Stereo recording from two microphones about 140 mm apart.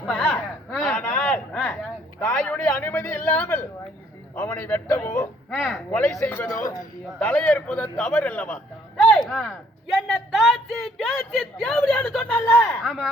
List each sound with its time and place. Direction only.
0.0 s a sound: 10° left (ahead or behind)
2.8 s a man's voice: 15° left (ahead or behind)
5.5 s a man's voice: 5° left (ahead or behind)
6.6 s a man's voice: 25° left (ahead or behind)
7.2 s a man's voice: 10° left (ahead or behind)